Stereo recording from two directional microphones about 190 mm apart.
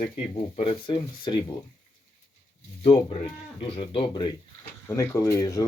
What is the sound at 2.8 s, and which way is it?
Speech, 30° left (ahead or behind).